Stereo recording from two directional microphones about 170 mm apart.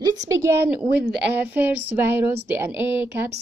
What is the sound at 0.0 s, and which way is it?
A woman's voice, 20° right (ahead or behind).